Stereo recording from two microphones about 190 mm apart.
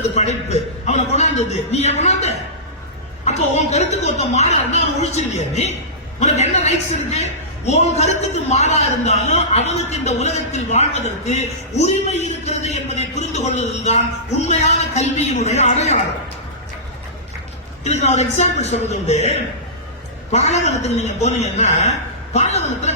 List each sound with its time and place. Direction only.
0.2 s a man's voice: 35° left (ahead or behind)
17.8 s a man's voice: 35° left (ahead or behind)